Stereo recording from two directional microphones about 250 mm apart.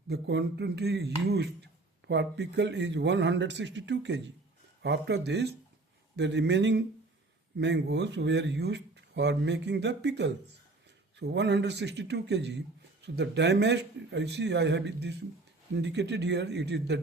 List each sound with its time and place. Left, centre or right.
0.1 s speech: right